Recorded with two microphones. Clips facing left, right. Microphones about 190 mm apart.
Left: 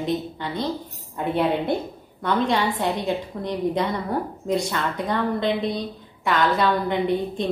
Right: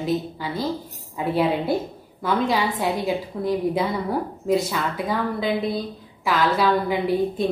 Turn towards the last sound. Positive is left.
turn(degrees=-5)  # may be behind; listen again after turning